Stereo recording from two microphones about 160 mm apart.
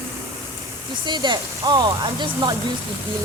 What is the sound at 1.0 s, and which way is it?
Speech, 30° right (ahead or behind).